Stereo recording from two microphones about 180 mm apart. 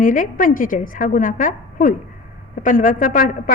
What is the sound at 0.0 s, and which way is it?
A woman's voice, 45° left (ahead or behind).